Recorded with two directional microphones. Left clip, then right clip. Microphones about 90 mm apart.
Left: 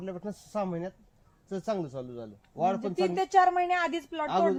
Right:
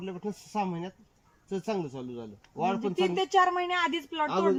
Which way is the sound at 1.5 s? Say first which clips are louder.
Even; 30° left (ahead or behind).